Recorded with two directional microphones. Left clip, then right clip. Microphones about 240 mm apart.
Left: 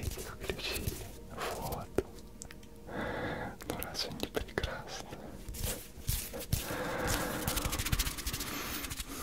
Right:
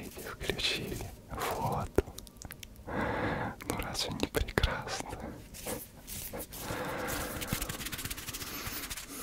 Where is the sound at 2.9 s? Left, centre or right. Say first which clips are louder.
Right 4 dB; right.